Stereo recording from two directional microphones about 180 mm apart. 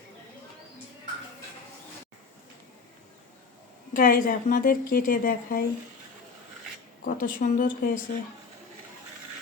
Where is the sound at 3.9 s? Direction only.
50° left (ahead or behind).